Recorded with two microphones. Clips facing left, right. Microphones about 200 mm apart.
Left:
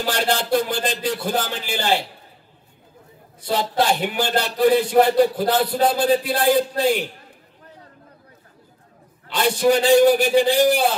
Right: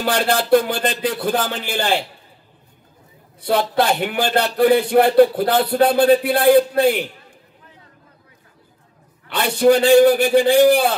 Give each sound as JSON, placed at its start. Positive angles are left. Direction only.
{"t": 0.0, "sound": "a man's voice", "side_deg": -60}
{"t": 3.3, "sound": "a man's voice", "side_deg": -60}
{"t": 9.3, "sound": "a man's voice", "side_deg": -60}